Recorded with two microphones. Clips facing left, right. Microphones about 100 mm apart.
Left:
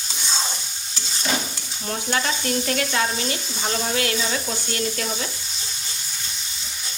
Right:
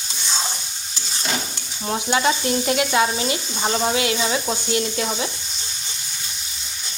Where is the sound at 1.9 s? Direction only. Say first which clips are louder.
Right 5 dB; 20° right (ahead or behind).